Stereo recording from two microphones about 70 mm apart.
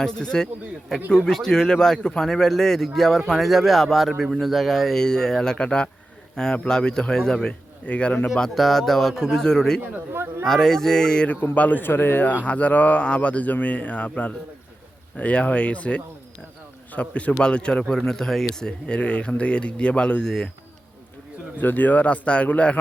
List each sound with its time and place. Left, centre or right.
0.0 s speech: centre
8.4 s speech: centre
9.9 s speech: right
10.4 s speech: centre
11.5 s speech: left; by 20.5 s centre
21.6 s speech: left